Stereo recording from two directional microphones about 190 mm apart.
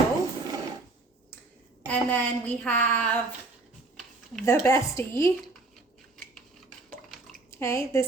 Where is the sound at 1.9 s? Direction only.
10° left (ahead or behind).